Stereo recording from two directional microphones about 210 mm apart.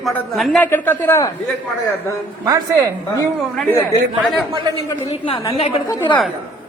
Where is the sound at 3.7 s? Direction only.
10° left (ahead or behind).